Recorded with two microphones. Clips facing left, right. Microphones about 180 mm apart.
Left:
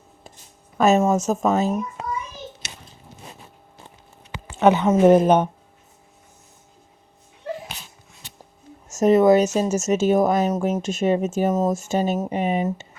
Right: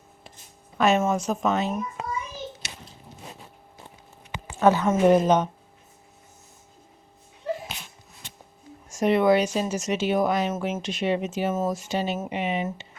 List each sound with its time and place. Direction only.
0.8 s speech: 45° left (ahead or behind)
4.5 s a woman's voice: 20° left (ahead or behind)
4.9 s speech: 45° left (ahead or behind)
8.9 s speech: 45° left (ahead or behind)